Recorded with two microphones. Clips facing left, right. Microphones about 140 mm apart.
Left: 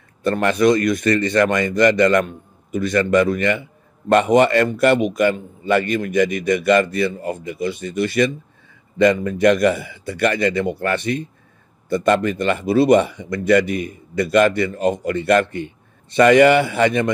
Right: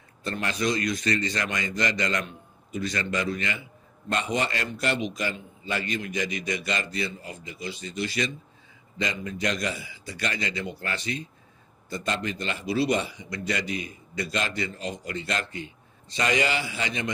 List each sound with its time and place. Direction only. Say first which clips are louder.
0.2 s speech: left 12 dB; 60° left (ahead or behind)